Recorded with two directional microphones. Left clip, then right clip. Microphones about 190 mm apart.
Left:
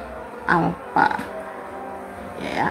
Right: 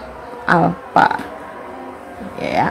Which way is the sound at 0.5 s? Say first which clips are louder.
Right 6 dB; 35° right (ahead or behind).